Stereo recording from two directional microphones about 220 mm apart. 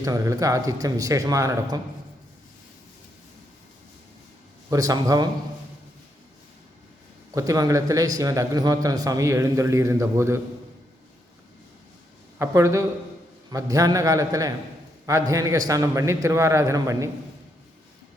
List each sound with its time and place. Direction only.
0.0 s a man's voice: 15° right (ahead or behind)
4.7 s a man's voice: 15° right (ahead or behind)
7.3 s a man's voice: 15° right (ahead or behind)
12.4 s a man's voice: 15° right (ahead or behind)